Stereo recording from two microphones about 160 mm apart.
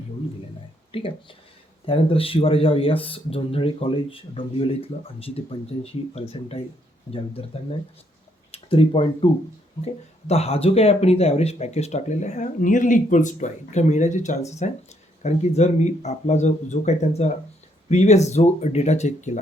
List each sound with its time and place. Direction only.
0.9 s speech: 35° left (ahead or behind)
8.5 s speech: 35° left (ahead or behind)